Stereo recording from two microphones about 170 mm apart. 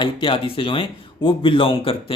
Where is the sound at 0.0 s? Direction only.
30° left (ahead or behind).